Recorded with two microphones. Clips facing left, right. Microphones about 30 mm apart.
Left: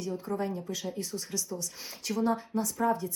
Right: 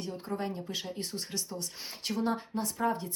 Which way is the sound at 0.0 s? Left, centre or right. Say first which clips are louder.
Left 3 dB; right.